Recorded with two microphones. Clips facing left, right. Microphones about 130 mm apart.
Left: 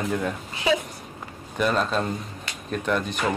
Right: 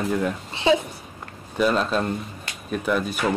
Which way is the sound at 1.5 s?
Centre (ahead or behind).